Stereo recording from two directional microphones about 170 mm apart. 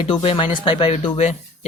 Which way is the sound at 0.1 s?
30° left (ahead or behind).